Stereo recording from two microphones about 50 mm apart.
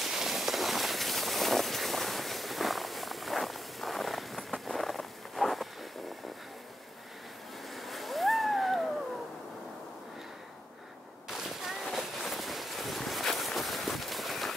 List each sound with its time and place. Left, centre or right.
0.0 s vehicle: centre
7.7 s splash: centre
11.2 s a sound: centre
11.9 s boat: centre